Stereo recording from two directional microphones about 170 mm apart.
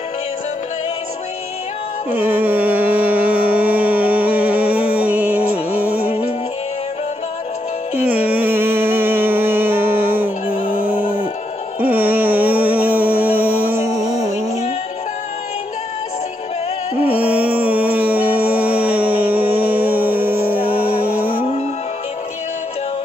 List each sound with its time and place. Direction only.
2.0 s music: 10° right (ahead or behind)
8.1 s music: 10° right (ahead or behind)
10.6 s music: 30° left (ahead or behind)
11.8 s music: 10° right (ahead or behind)
17.1 s music: 10° right (ahead or behind)